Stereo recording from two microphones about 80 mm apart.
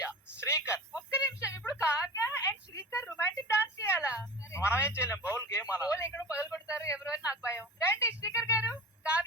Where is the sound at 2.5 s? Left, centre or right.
Left.